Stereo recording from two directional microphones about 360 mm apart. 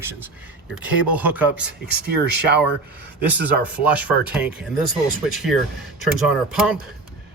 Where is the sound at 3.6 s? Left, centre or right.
Centre.